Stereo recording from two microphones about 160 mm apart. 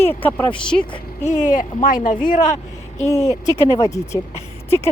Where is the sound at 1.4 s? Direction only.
55° left (ahead or behind).